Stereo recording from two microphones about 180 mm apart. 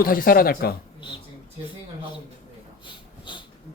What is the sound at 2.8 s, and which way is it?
Wheeze, 25° left (ahead or behind).